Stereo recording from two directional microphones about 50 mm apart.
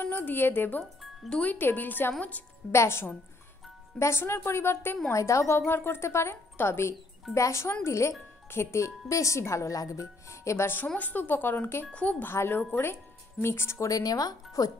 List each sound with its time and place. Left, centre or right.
0.0 s a woman's voice: left
2.7 s a woman's voice: left
5.1 s a woman's voice: left
5.6 s speech: left
6.0 s a woman's voice: left
7.3 s speech: left
11.0 s speech: left
11.9 s speech: left
12.2 s speech: left
13.4 s a woman's voice: left